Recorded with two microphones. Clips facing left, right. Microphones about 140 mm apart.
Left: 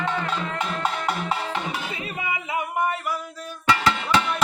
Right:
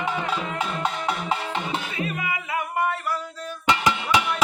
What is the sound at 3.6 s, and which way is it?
Music, 20° right (ahead or behind).